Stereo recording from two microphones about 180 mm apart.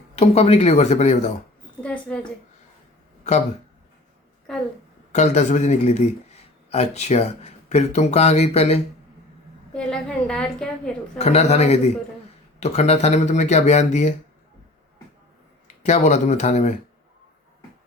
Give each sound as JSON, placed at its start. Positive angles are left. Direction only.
{"t": 0.2, "sound": "speech", "side_deg": 35}
{"t": 1.8, "sound": "a woman's voice", "side_deg": 5}
{"t": 5.1, "sound": "speech", "side_deg": 40}
{"t": 9.7, "sound": "a woman's voice", "side_deg": 5}
{"t": 11.2, "sound": "speech", "side_deg": 40}
{"t": 15.6, "sound": "speech", "side_deg": 40}